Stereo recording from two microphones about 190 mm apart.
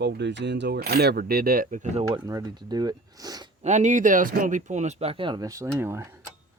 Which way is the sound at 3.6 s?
40° right (ahead or behind).